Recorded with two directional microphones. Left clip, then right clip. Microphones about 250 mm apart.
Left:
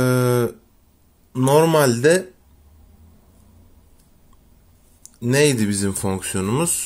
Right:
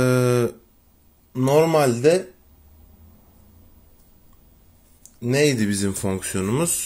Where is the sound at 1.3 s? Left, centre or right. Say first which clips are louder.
Left 2 dB; centre.